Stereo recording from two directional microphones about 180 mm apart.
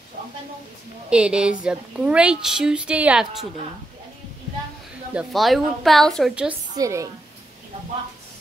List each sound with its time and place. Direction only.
1.1 s a woman's voice: 5° right (ahead or behind)
5.1 s a woman's voice: centre (ahead or behind)
6.8 s a woman's voice: 15° right (ahead or behind)